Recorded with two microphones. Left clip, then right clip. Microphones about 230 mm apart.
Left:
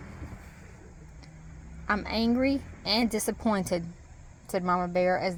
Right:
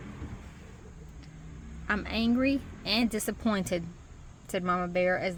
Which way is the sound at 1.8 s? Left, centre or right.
Left.